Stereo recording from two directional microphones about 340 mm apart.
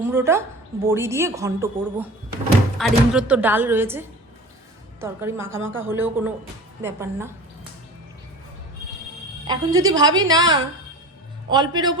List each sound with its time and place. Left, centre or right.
0.0 s a woman's voice: centre
5.5 s speech: right
5.8 s a woman's voice: centre
9.5 s a woman's voice: centre